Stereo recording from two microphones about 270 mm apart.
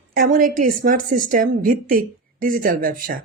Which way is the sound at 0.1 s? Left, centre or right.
Right.